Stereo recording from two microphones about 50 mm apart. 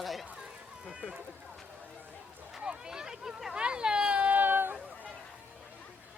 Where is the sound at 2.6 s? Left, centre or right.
Centre.